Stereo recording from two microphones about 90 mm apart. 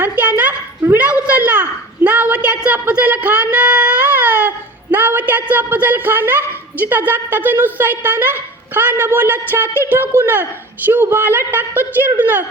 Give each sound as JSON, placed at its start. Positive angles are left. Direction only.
{"t": 0.0, "sound": "a woman's voice", "side_deg": -20}